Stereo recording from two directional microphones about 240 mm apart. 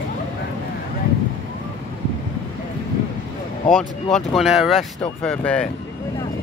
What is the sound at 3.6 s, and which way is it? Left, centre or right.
Speech, centre.